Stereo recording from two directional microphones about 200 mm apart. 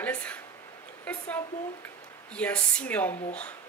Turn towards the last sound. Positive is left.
turn(degrees=5)  # may be behind; listen again after turning